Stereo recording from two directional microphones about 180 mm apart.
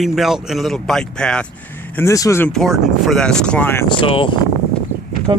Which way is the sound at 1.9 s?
15° left (ahead or behind).